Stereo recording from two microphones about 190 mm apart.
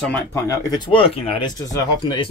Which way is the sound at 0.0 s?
10° left (ahead or behind).